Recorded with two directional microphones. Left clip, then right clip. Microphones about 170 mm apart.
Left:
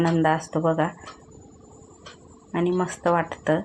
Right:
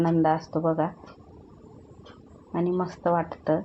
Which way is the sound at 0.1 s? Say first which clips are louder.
Left 1 dB; 20° left (ahead or behind).